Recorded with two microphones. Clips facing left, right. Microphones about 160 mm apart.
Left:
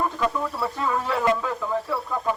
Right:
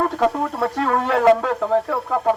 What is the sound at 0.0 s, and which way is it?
Speech, 70° right (ahead or behind).